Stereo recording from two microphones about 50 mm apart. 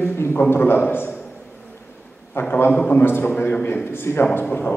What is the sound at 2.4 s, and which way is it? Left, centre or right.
A man's voice, left.